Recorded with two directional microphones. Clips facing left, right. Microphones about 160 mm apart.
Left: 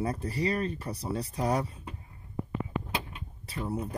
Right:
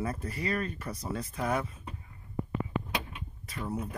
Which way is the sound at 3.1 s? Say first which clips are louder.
Even; 30° left (ahead or behind).